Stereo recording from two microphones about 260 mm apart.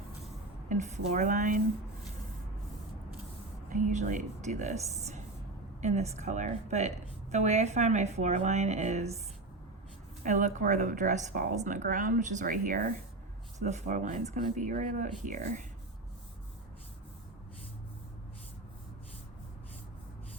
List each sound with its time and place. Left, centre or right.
0.7 s a woman's voice: right
3.7 s a woman's voice: right
5.8 s a woman's voice: right
10.2 s a woman's voice: right